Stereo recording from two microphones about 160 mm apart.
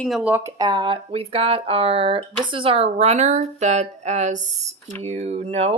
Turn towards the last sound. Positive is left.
turn(degrees=-40)  # may be behind; listen again after turning